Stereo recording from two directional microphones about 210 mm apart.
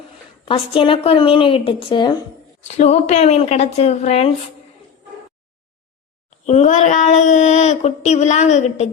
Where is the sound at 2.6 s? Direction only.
30° left (ahead or behind).